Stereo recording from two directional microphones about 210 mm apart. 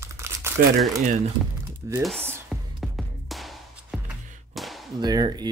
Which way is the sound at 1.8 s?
15° right (ahead or behind).